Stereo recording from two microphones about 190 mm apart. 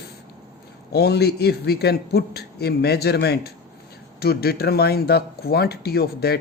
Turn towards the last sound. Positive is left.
turn(degrees=55)  # may be behind; listen again after turning